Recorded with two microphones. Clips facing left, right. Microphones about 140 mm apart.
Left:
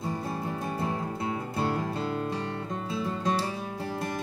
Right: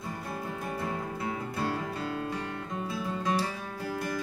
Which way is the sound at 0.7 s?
30° left (ahead or behind).